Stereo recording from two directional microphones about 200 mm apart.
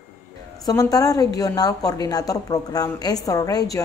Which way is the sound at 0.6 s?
15° left (ahead or behind).